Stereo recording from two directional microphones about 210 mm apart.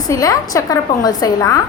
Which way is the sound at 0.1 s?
15° left (ahead or behind).